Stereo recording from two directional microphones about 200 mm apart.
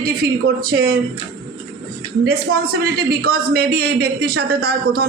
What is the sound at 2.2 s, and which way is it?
A man's voice, 50° right (ahead or behind).